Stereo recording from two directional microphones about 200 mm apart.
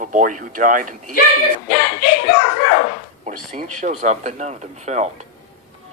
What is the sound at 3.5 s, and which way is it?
Speech, 35° right (ahead or behind).